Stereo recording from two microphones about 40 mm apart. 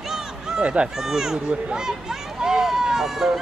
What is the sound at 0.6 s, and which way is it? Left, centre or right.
Speech, right.